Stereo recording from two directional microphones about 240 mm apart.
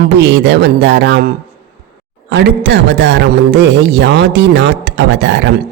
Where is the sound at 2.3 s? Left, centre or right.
Right.